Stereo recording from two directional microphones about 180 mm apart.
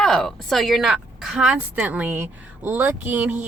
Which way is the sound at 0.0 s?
Centre (ahead or behind).